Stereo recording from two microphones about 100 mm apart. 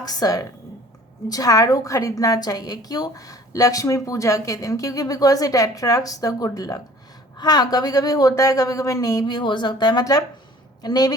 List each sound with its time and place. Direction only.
0.0 s a woman's voice: 40° left (ahead or behind)